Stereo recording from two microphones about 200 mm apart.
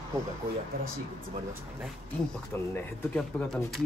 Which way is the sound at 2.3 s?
10° left (ahead or behind).